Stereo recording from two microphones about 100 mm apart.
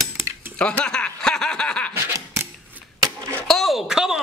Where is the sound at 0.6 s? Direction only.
10° left (ahead or behind).